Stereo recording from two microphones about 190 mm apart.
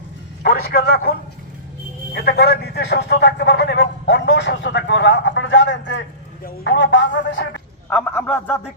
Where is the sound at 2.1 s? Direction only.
60° left (ahead or behind).